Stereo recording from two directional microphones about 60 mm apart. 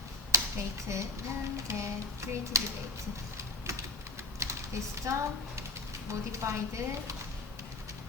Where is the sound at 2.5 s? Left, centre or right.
Right.